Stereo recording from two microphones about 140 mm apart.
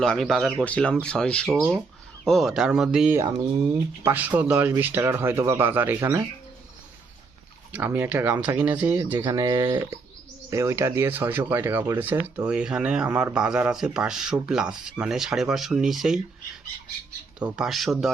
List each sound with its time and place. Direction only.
0.0 s speech: centre (ahead or behind); by 6.2 s 20° right (ahead or behind)
7.7 s speech: 15° right (ahead or behind)
9.1 s speech: 30° right (ahead or behind)
10.5 s speech: 20° right (ahead or behind); by 16.2 s centre (ahead or behind)
17.4 s speech: 5° right (ahead or behind)